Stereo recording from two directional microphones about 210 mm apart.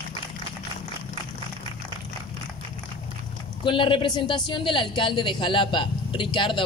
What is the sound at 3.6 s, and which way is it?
Speech, 25° left (ahead or behind).